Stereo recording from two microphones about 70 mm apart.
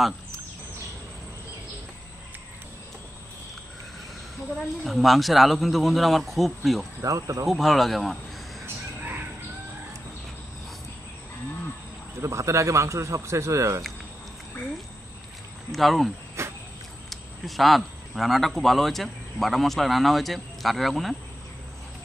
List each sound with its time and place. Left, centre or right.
4.8 s speech: centre
7.0 s a man's voice: right
7.4 s speech: centre
12.2 s a man's voice: right
15.7 s speech: centre
16.4 s vehicle: right
17.1 s speech: centre